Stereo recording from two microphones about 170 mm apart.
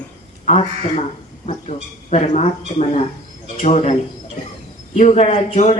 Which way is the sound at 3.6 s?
40° left (ahead or behind).